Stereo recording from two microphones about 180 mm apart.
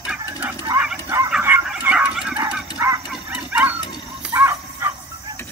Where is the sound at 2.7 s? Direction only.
15° right (ahead or behind).